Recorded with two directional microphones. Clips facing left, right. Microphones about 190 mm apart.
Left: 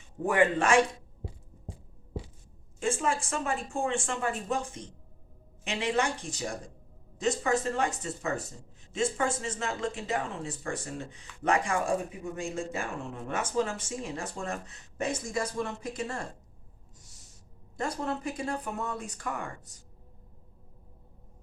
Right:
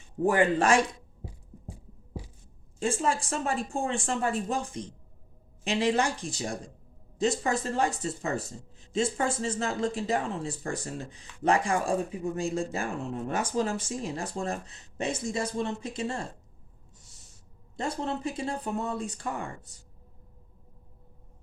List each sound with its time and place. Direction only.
0.3 s speech: 35° right (ahead or behind)
2.7 s speech: 35° right (ahead or behind)
17.7 s speech: 25° right (ahead or behind)